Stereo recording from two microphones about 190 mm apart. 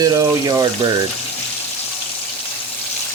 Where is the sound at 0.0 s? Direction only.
20° right (ahead or behind).